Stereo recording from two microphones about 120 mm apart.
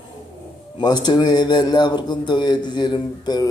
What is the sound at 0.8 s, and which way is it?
Speech, 35° left (ahead or behind).